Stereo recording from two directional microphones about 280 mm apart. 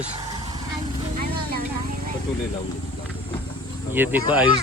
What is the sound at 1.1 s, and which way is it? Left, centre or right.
Vehicle, right.